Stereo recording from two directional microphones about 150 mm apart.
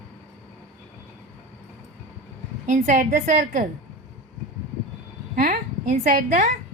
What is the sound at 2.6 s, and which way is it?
Speech, 60° right (ahead or behind).